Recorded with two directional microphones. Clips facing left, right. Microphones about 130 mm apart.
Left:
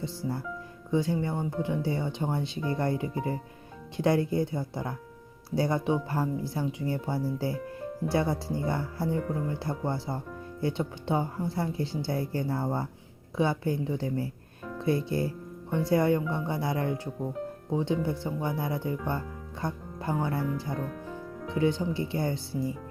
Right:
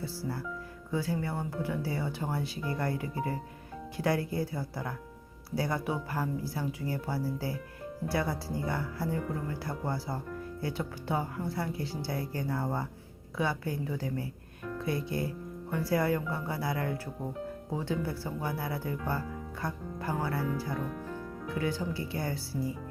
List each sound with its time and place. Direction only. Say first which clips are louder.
0.0 s speech: left 3 dB; 20° left (ahead or behind)